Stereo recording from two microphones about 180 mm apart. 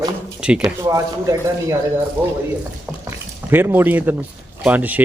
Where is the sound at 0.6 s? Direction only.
20° right (ahead or behind).